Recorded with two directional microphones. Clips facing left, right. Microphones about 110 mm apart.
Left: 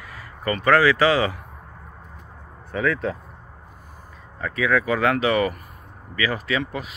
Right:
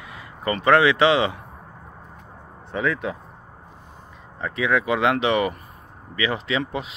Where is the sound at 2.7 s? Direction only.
15° right (ahead or behind).